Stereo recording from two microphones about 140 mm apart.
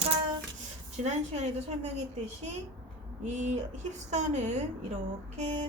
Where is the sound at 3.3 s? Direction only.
55° right (ahead or behind).